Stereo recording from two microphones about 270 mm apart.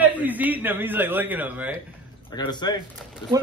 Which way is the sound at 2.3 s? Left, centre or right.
Centre.